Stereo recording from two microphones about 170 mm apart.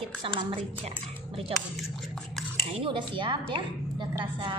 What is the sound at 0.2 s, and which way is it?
A woman's voice, 30° right (ahead or behind).